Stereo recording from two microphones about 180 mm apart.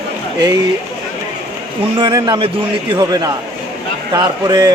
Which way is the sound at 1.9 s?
25° right (ahead or behind).